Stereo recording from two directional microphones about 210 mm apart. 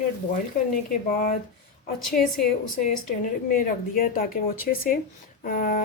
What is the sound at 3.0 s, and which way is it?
A woman's voice, 40° left (ahead or behind).